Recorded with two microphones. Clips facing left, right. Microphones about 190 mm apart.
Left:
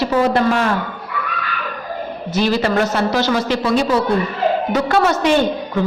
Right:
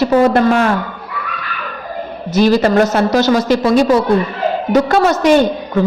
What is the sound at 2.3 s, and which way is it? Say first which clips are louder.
A man's voice: right 6 dB; 45° right (ahead or behind).